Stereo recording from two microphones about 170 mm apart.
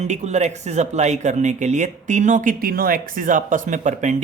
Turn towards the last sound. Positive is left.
turn(degrees=-45)  # may be behind; listen again after turning